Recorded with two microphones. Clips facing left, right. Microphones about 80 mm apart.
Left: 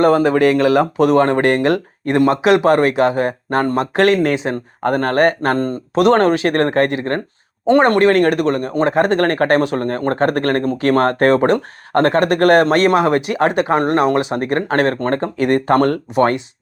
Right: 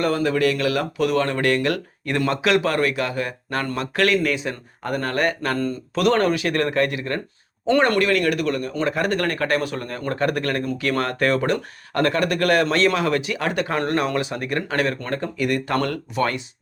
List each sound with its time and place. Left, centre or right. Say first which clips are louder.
0.0 s speech: left 8 dB; left
0.9 s speech: left 8 dB; left
2.4 s speech: left 6 dB; centre
2.7 s speech: left 8 dB; left
5.9 s speech: left 7 dB; left
6.1 s speech: left 6 dB; left
7.7 s speech: left 6 dB; left
14.3 s speech: left 7 dB; left